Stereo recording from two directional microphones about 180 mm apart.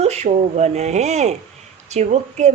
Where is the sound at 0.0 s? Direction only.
35° right (ahead or behind).